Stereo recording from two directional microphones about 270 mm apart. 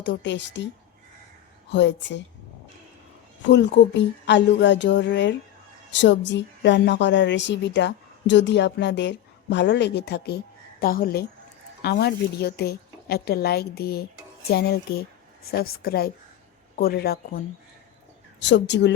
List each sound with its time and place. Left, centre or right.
0.0 s a woman's voice: left
1.7 s a woman's voice: left
3.5 s a woman's voice: left